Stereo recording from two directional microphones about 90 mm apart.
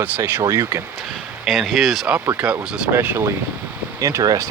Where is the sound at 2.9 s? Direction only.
25° right (ahead or behind).